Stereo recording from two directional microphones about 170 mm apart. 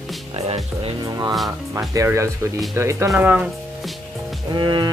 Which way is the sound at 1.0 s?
20° right (ahead or behind).